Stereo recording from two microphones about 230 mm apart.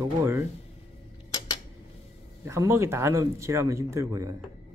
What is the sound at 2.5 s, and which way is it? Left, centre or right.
Speech, centre.